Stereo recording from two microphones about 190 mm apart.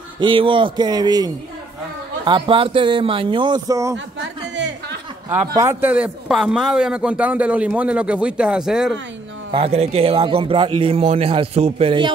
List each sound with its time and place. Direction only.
0.2 s a man's voice: 25° right (ahead or behind)
5.5 s a man's voice: 15° right (ahead or behind)
9.5 s a man's voice: 30° right (ahead or behind)